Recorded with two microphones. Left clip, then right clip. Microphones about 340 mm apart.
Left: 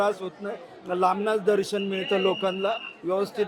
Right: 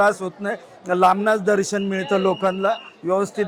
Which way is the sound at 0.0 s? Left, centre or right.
Right.